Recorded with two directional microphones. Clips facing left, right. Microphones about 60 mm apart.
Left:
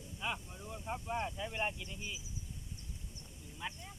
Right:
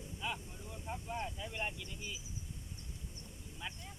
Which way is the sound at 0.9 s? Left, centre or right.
Left.